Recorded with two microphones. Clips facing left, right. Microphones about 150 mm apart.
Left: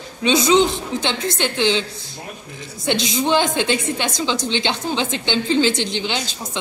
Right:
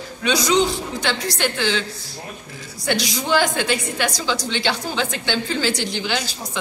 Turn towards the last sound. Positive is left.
turn(degrees=20)  # may be behind; listen again after turning